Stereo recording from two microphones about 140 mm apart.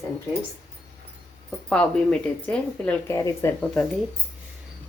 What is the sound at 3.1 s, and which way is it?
Speech, 20° left (ahead or behind).